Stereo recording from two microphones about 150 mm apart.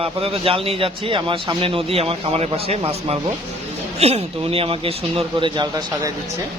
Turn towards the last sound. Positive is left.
turn(degrees=-30)  # may be behind; listen again after turning